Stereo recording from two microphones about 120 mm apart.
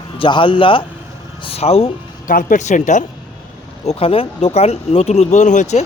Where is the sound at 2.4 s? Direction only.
90° left.